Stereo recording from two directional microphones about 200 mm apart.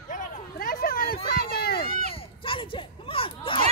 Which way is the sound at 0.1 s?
40° left (ahead or behind).